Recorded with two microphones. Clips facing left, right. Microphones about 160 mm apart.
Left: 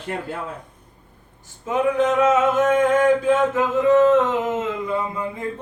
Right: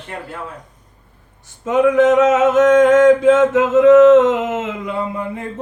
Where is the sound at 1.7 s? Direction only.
80° right.